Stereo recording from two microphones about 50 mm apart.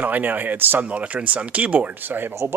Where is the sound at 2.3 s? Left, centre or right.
Right.